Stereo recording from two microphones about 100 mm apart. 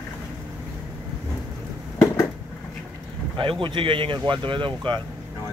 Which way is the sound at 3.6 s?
60° right (ahead or behind).